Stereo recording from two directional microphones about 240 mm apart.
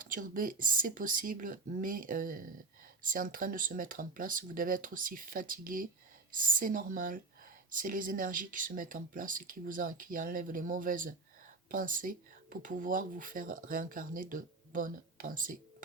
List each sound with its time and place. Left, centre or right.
0.0 s speech: right